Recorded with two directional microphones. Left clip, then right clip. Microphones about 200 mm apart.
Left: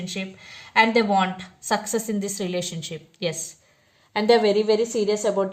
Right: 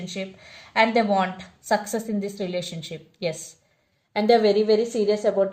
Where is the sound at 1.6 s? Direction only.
40° left (ahead or behind).